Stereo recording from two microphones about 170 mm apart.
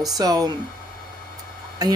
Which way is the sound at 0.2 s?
20° right (ahead or behind).